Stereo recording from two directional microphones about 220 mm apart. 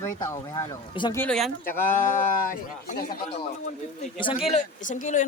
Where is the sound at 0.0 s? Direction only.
15° left (ahead or behind).